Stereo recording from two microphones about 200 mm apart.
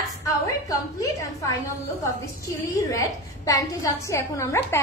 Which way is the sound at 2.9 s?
15° left (ahead or behind).